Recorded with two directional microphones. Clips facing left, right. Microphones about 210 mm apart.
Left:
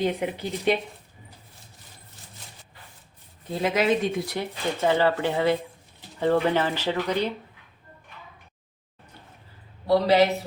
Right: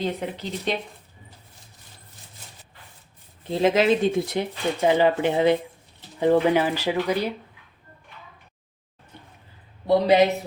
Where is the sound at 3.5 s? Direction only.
25° right (ahead or behind); by 7.3 s 10° right (ahead or behind).